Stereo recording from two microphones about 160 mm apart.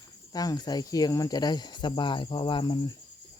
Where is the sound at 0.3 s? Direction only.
25° left (ahead or behind).